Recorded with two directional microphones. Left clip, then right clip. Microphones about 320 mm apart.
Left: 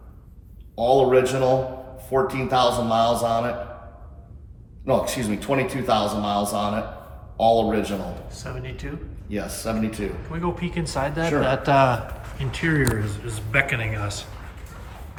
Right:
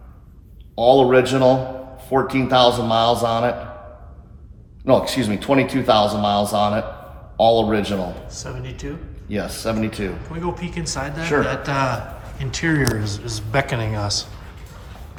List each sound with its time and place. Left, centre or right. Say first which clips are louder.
0.8 s a man's voice: right 4 dB; right
4.9 s a man's voice: right 5 dB; right
8.3 s a man's voice: right 2 dB; centre
9.3 s a man's voice: right 4 dB; right
10.3 s a man's voice: right 1 dB; centre